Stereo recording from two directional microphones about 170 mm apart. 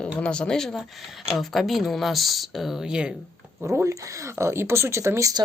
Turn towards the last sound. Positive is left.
turn(degrees=-20)  # may be behind; listen again after turning